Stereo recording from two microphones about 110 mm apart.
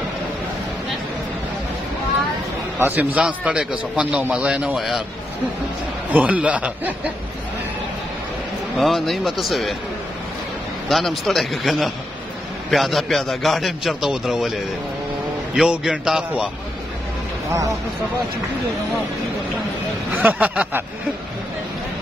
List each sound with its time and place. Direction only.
2.8 s a man's voice: 15° right (ahead or behind)
6.1 s a man's voice: 10° right (ahead or behind)
8.7 s a man's voice: centre (ahead or behind)
10.9 s a man's voice: centre (ahead or behind)
15.5 s a man's voice: 5° right (ahead or behind)
17.5 s speech: 30° right (ahead or behind)
20.1 s a man's voice: 15° right (ahead or behind)